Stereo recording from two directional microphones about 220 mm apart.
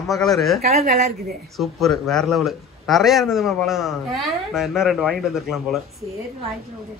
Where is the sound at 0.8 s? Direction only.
30° right (ahead or behind).